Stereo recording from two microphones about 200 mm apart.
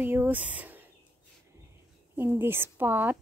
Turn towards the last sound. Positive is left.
turn(degrees=-10)  # may be behind; listen again after turning